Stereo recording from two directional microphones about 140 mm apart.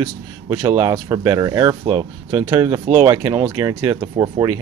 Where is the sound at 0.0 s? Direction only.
20° right (ahead or behind).